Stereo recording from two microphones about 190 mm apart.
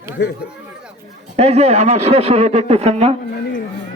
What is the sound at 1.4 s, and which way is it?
A man's voice, 35° right (ahead or behind).